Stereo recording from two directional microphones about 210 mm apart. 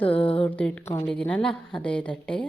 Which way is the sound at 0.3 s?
5° left (ahead or behind).